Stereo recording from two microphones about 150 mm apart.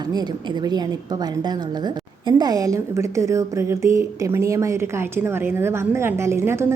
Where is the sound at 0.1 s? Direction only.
25° right (ahead or behind).